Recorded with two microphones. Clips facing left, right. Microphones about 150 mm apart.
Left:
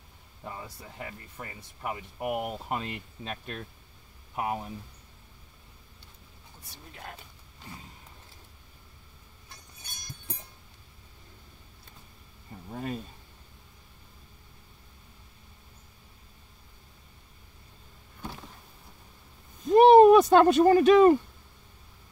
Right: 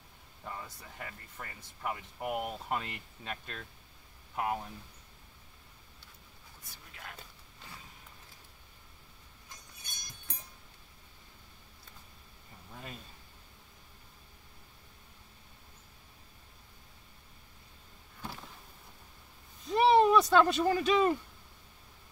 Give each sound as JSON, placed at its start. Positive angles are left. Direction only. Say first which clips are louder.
{"t": 0.4, "sound": "speech", "louder": "left 3 dB", "side_deg": 15}
{"t": 19.7, "sound": "speech", "louder": "left 9 dB", "side_deg": 50}